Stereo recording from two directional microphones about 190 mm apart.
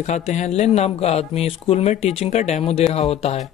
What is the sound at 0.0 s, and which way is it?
Speech, 35° left (ahead or behind).